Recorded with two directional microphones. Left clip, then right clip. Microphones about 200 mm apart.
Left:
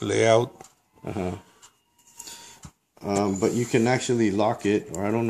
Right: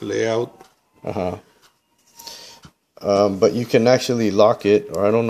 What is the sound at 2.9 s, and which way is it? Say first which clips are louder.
Speech: right 9 dB; 40° right (ahead or behind).